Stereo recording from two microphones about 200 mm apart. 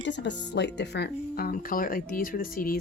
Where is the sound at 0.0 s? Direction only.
60° left (ahead or behind).